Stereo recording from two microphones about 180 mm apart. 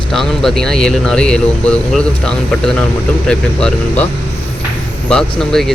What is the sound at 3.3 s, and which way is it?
Speech, 5° left (ahead or behind).